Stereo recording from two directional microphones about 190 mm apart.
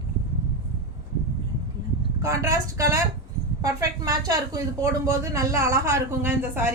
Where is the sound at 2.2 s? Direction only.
15° right (ahead or behind).